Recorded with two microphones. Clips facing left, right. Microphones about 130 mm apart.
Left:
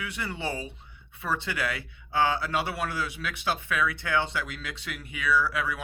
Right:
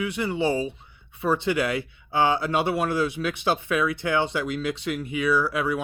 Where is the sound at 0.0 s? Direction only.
20° right (ahead or behind).